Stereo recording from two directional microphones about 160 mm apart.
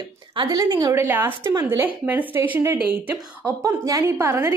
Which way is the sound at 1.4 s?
25° right (ahead or behind).